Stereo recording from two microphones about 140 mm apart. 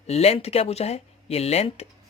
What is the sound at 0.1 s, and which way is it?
Speech, 45° left (ahead or behind).